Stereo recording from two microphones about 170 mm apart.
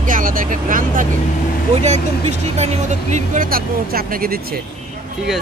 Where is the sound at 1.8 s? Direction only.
40° right (ahead or behind); by 4.4 s 60° right (ahead or behind).